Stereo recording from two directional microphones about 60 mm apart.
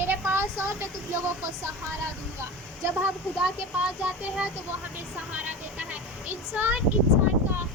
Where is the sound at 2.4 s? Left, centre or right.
Right.